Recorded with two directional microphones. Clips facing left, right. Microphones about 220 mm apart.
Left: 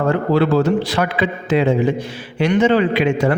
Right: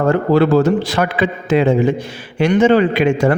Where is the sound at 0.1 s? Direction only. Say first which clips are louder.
Right 4 dB; 45° right (ahead or behind).